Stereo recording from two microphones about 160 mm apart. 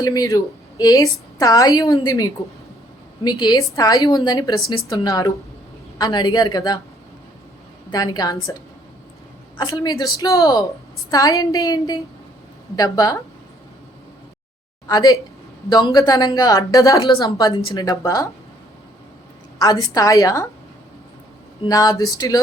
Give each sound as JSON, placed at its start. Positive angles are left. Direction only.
{"t": 0.0, "sound": "a woman's voice", "side_deg": 20}
{"t": 7.9, "sound": "a woman's voice", "side_deg": 25}
{"t": 9.6, "sound": "a woman's voice", "side_deg": 25}
{"t": 14.8, "sound": "a woman's voice", "side_deg": 25}
{"t": 19.5, "sound": "a woman's voice", "side_deg": 20}
{"t": 21.6, "sound": "a woman's voice", "side_deg": 25}